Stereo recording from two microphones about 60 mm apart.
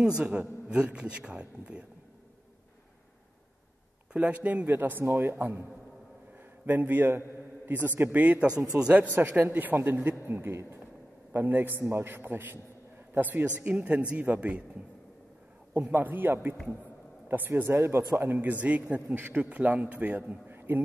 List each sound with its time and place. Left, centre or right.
0.2 s a man's voice: centre
4.1 s a man's voice: right
6.6 s a man's voice: right; by 9.0 s centre
9.5 s a man's voice: right
11.3 s a man's voice: right
11.8 s a man's voice: right
15.9 s a man's voice: right
18.4 s a man's voice: right
20.5 s a sound: right